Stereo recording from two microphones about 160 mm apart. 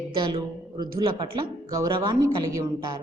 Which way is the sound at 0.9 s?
20° right (ahead or behind).